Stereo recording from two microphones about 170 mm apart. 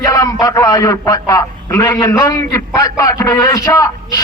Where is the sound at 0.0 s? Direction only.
20° left (ahead or behind).